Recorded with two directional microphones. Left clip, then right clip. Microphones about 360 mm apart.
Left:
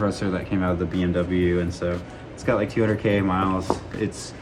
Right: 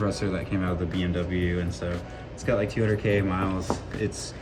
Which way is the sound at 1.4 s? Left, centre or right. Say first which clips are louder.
Left 8 dB; left.